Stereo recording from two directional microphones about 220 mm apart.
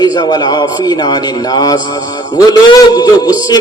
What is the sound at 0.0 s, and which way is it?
A man's voice, 20° left (ahead or behind).